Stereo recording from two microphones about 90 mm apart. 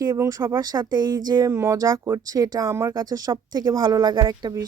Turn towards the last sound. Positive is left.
turn(degrees=-45)  # may be behind; listen again after turning